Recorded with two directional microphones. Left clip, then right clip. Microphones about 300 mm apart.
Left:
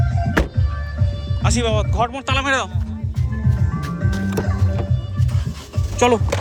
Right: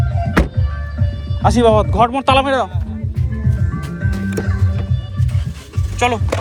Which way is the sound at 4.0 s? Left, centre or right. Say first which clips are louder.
Right 2 dB; left.